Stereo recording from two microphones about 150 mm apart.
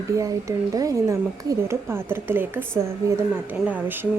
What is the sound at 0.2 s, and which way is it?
Speech, 20° right (ahead or behind).